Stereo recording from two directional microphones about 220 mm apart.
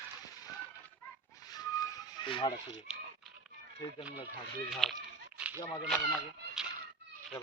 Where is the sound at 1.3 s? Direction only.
15° left (ahead or behind).